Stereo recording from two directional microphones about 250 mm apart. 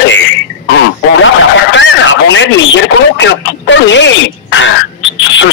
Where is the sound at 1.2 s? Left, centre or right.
Left.